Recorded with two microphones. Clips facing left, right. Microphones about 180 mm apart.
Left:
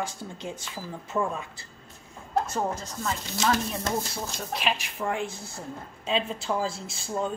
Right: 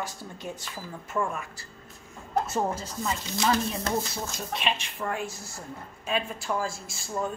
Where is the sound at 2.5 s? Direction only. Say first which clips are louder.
Right 1 dB; 5° right (ahead or behind).